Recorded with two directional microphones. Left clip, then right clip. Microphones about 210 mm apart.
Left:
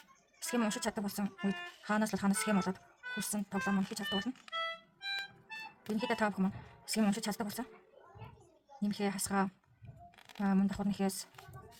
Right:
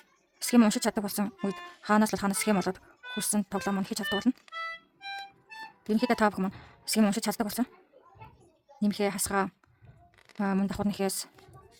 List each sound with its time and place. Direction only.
0.3 s speech: 45° right (ahead or behind)
6.0 s speech: 45° right (ahead or behind)
8.8 s speech: 45° right (ahead or behind)